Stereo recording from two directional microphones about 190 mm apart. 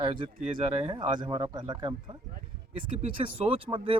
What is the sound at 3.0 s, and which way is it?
Speech, 30° right (ahead or behind).